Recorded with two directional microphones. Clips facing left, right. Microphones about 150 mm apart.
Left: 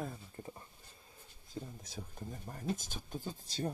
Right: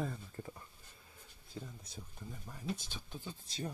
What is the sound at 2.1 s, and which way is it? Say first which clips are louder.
Speech: left 3 dB; 45° left (ahead or behind).